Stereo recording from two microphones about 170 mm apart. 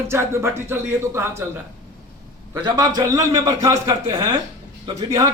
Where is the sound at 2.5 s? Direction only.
20° right (ahead or behind).